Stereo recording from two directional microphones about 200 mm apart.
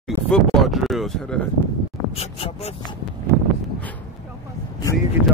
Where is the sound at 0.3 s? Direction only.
Centre (ahead or behind).